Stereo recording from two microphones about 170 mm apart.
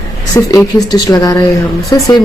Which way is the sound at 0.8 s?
20° left (ahead or behind).